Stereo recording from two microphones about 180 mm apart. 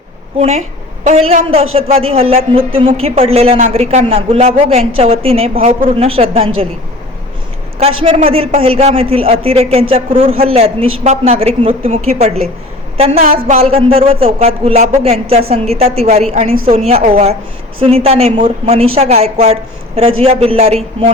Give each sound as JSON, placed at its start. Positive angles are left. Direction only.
{"t": 0.3, "sound": "a man's voice", "side_deg": -35}
{"t": 7.8, "sound": "a man's voice", "side_deg": -35}
{"t": 13.1, "sound": "a woman's voice", "side_deg": -55}
{"t": 13.5, "sound": "a man's voice", "side_deg": -35}